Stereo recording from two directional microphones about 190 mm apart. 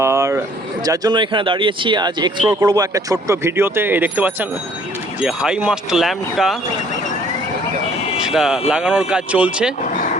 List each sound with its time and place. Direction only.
0.0 s a sound: 15° right (ahead or behind)
0.9 s speech: 20° right (ahead or behind); by 6.6 s centre (ahead or behind)
8.2 s speech: 5° right (ahead or behind)